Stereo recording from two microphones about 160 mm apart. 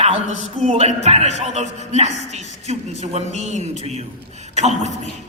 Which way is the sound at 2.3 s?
45° right (ahead or behind).